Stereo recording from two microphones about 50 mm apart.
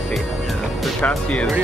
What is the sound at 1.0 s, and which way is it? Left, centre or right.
Speech, left.